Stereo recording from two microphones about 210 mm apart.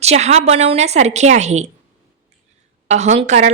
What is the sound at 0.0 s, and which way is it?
A woman's voice, 30° right (ahead or behind).